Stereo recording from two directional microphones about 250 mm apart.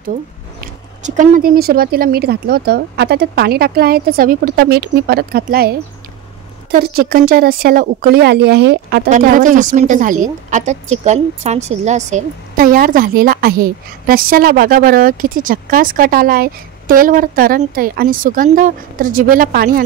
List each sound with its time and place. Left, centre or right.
1.0 s speech: right